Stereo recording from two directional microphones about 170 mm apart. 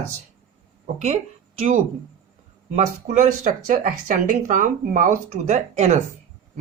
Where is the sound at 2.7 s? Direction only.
45° right (ahead or behind).